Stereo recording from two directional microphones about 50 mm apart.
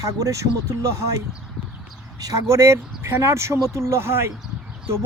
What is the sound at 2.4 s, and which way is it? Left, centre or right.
Speech, right.